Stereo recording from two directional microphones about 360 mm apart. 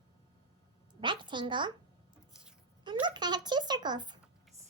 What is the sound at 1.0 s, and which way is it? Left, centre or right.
Speech, centre.